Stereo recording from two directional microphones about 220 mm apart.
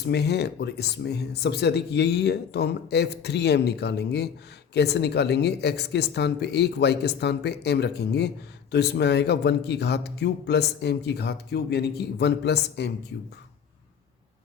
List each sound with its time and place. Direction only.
0.0 s speech: 50° left (ahead or behind)